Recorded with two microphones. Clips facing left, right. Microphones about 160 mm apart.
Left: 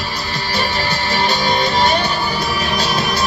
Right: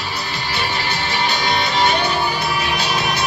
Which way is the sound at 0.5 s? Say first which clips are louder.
Left 3 dB; 40° left (ahead or behind).